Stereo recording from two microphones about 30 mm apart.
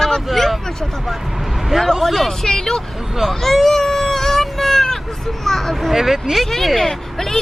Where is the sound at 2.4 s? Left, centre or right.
Centre.